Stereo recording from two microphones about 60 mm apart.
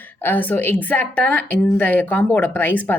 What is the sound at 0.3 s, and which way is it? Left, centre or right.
A woman's voice, left.